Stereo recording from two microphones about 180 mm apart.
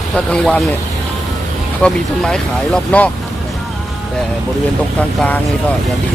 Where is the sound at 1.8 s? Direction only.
5° left (ahead or behind).